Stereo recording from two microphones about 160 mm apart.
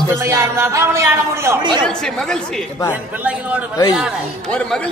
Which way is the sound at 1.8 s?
5° left (ahead or behind).